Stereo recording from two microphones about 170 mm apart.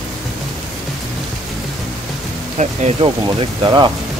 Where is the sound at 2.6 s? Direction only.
40° right (ahead or behind); by 3.9 s 25° right (ahead or behind).